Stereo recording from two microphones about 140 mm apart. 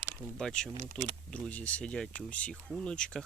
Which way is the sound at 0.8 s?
65° right (ahead or behind).